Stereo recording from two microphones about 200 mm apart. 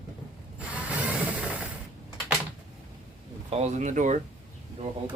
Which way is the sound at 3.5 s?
35° right (ahead or behind).